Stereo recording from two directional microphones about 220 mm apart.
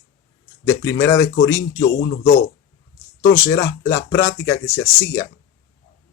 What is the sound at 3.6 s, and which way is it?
Speech, 15° left (ahead or behind).